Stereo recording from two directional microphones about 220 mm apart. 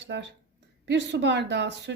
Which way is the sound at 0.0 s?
50° right (ahead or behind).